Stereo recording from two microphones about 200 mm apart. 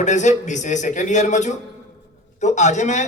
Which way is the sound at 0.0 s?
35° left (ahead or behind).